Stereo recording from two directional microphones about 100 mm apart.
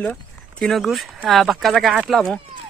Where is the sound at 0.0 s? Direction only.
10° left (ahead or behind).